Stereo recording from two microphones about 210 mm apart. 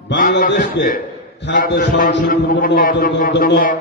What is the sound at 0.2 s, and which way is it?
A man's voice, 50° left (ahead or behind).